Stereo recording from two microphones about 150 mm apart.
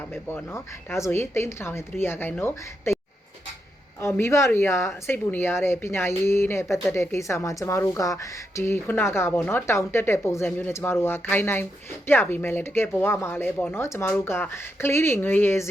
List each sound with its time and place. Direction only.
0.1 s a woman's voice: 15° left (ahead or behind)
4.0 s a woman's voice: 20° left (ahead or behind)